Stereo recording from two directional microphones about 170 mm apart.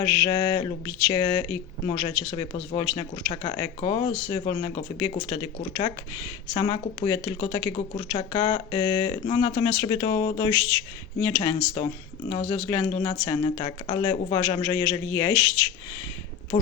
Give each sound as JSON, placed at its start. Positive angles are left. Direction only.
{"t": 0.0, "sound": "speech", "side_deg": 25}